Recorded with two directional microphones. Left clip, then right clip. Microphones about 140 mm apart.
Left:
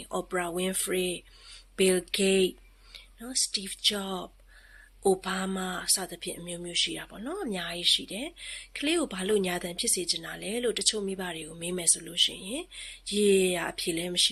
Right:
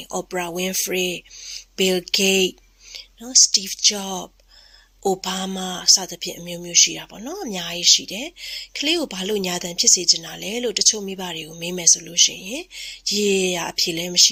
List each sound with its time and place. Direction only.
0.0 s speech: 35° right (ahead or behind)